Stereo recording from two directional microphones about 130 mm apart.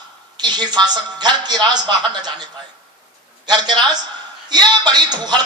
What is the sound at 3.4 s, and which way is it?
A woman's voice, 35° right (ahead or behind).